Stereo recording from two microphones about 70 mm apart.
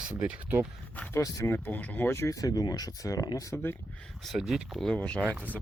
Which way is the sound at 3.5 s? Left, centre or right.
Left.